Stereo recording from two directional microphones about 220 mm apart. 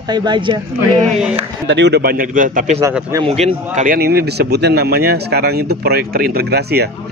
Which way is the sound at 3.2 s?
30° right (ahead or behind).